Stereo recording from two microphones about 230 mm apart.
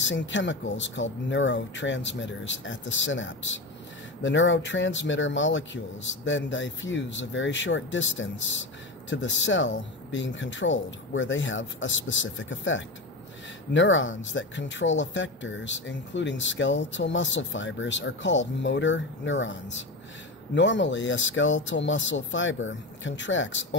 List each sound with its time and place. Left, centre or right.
0.0 s speech: left